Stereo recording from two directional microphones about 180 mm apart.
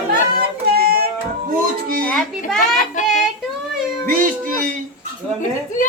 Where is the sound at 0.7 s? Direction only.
60° right (ahead or behind).